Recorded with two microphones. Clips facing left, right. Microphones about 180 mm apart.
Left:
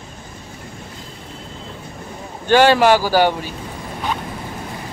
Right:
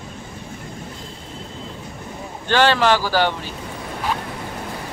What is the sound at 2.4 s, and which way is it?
Speech, 10° left (ahead or behind).